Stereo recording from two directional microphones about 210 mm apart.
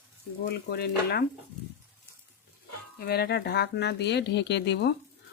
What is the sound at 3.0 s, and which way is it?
Speech, 50° left (ahead or behind).